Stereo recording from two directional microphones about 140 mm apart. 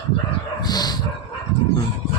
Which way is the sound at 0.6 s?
30° left (ahead or behind).